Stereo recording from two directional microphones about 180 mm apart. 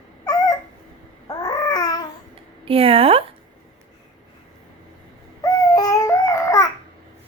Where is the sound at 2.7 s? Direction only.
30° right (ahead or behind).